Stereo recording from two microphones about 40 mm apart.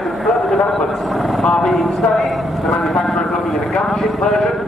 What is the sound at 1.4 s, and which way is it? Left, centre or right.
Speech, centre.